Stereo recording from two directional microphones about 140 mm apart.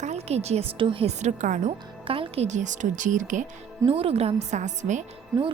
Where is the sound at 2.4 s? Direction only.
60° right (ahead or behind).